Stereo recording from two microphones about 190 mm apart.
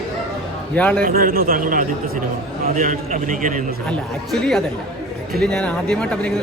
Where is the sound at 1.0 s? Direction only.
50° right (ahead or behind).